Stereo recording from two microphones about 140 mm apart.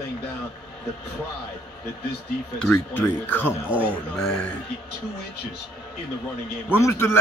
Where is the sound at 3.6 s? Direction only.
10° right (ahead or behind).